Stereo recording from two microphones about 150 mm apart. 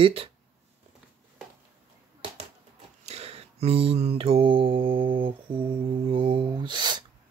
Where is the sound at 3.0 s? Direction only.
45° right (ahead or behind).